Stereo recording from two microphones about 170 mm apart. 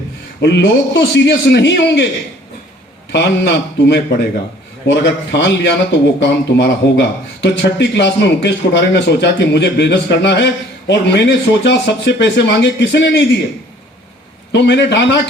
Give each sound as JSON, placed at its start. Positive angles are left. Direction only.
{"t": 0.4, "sound": "a man's voice", "side_deg": 90}
{"t": 3.1, "sound": "a man's voice", "side_deg": 90}
{"t": 14.5, "sound": "a man's voice", "side_deg": 90}